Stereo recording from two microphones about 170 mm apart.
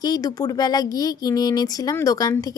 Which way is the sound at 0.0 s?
20° left (ahead or behind).